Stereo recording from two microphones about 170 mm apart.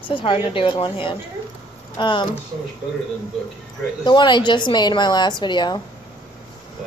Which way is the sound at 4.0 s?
25° left (ahead or behind).